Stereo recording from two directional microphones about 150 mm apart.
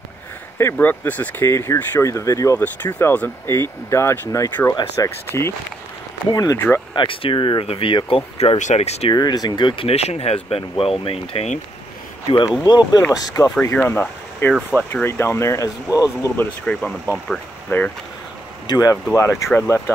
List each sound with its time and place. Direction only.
0.6 s speech: 15° left (ahead or behind)
7.0 s speech: 35° left (ahead or behind)
8.5 s speech: 50° left (ahead or behind)
9.1 s speech: 25° left (ahead or behind); by 11.6 s 45° left (ahead or behind)
12.6 s speech: 30° left (ahead or behind); by 14.5 s 15° left (ahead or behind)
14.5 s speech: 5° right (ahead or behind)
14.9 s speech: 15° left (ahead or behind)
16.6 s speech: 5° left (ahead or behind)
18.7 s speech: 25° left (ahead or behind)